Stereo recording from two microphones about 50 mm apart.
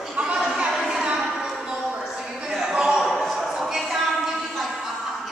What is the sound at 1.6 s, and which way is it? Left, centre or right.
Music, centre.